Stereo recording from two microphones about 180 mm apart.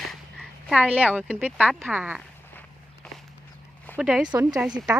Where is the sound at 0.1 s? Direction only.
Centre (ahead or behind).